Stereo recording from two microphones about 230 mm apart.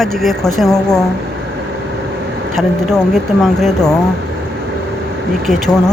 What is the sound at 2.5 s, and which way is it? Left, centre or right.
Speech, centre.